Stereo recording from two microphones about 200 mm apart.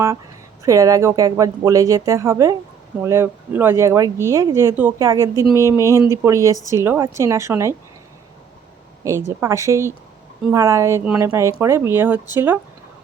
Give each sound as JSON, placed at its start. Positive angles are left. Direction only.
{"t": 0.6, "sound": "speech", "side_deg": -15}
{"t": 9.0, "sound": "speech", "side_deg": -15}